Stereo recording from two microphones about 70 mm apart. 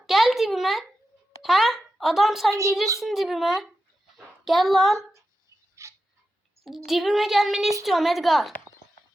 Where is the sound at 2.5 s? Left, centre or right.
Right.